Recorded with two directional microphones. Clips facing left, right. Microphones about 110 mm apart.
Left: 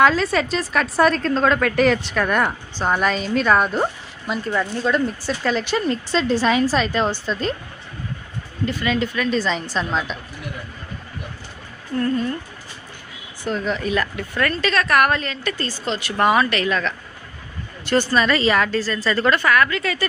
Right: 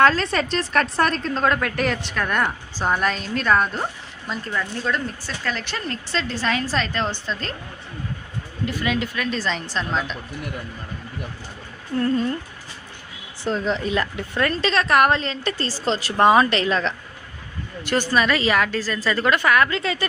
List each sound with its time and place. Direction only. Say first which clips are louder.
0.0 s a woman's voice: left 1 dB; 5° left (ahead or behind)
8.6 s a woman's voice: left 3 dB; 5° right (ahead or behind)
11.9 s a woman's voice: even; 25° right (ahead or behind)
13.4 s a woman's voice: even; 25° right (ahead or behind)
17.8 s a woman's voice: left 2 dB; 10° right (ahead or behind)